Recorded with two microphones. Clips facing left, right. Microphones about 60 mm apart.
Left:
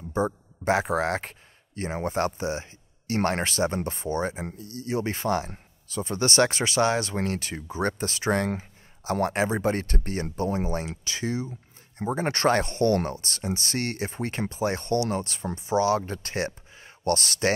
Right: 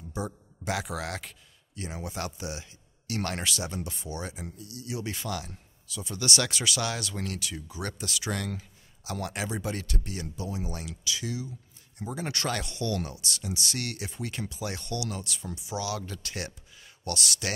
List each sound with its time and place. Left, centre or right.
0.1 s speech: left